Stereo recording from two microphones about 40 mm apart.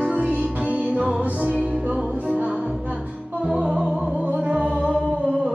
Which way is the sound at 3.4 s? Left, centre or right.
Centre.